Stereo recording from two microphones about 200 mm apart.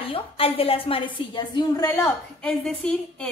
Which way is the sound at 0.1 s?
30° left (ahead or behind).